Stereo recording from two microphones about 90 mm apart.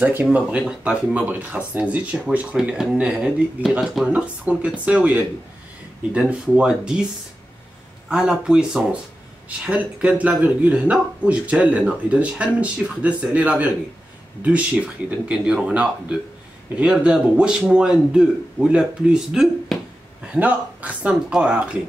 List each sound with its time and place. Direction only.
0.0 s speech: 15° right (ahead or behind)
8.1 s speech: 5° right (ahead or behind)